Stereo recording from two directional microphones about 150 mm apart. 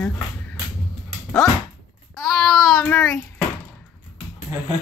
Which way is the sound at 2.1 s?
Centre (ahead or behind).